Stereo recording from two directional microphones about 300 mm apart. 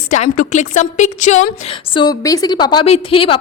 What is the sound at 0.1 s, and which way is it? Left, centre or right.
A woman's voice, left.